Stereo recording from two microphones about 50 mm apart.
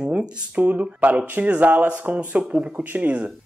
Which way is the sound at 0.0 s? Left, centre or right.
Right.